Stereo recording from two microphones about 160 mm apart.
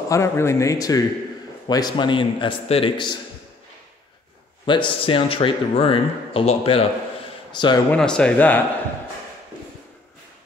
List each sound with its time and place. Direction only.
0.1 s a man's voice: 15° left (ahead or behind)
4.6 s a man's voice: 30° left (ahead or behind)
7.9 s speech: 5° left (ahead or behind)